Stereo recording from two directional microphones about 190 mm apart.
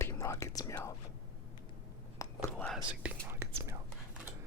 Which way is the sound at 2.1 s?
15° left (ahead or behind).